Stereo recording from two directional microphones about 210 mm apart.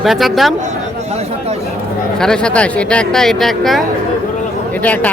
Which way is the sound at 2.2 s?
5° left (ahead or behind).